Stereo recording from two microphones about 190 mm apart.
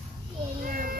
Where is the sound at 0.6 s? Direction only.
45° right (ahead or behind).